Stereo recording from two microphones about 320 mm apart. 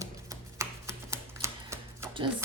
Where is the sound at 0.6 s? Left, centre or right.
Centre.